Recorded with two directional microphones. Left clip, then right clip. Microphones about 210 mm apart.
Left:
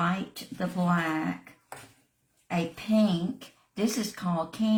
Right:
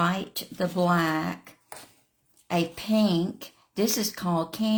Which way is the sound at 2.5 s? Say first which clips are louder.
Right 3 dB; 45° right (ahead or behind).